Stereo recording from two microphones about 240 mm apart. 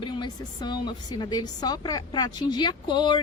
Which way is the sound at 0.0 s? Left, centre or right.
Centre.